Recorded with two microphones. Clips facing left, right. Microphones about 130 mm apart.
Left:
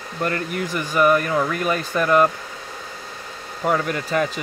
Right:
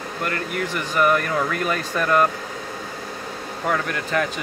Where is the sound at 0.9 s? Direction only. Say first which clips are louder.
Left 2 dB; 10° left (ahead or behind).